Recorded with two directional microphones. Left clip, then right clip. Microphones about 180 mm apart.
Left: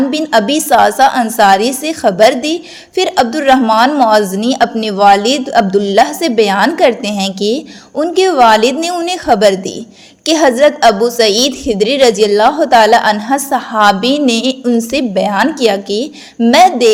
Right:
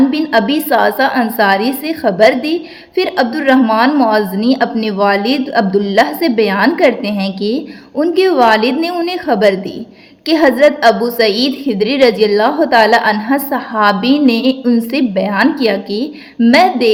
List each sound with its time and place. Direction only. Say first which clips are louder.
0.1 s a woman's voice: left 2 dB; 35° left (ahead or behind)